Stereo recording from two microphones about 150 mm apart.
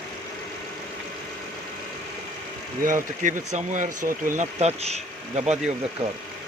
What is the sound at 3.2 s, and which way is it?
Speech, 55° right (ahead or behind).